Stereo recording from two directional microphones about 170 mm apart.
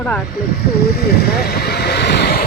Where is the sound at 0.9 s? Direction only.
65° left (ahead or behind).